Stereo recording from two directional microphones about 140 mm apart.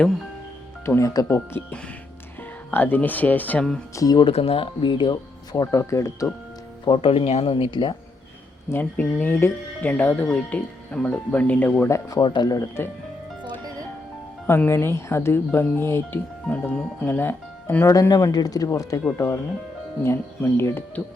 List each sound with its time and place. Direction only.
0.9 s speech: 20° left (ahead or behind)
3.9 s speech: 25° left (ahead or behind)
4.3 s speech: 45° left (ahead or behind); by 6.3 s 20° left (ahead or behind)
6.8 s speech: 40° left (ahead or behind)
8.7 s speech: 10° left (ahead or behind)
14.4 s speech: 15° left (ahead or behind)